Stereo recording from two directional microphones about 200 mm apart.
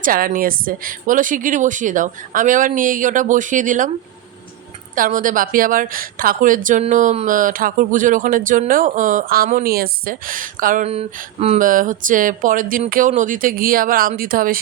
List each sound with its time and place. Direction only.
0.0 s a woman's voice: 45° right (ahead or behind)
4.9 s a woman's voice: 45° right (ahead or behind)